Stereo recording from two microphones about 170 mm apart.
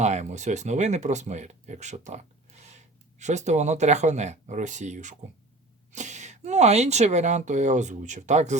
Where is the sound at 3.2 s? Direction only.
45° right (ahead or behind).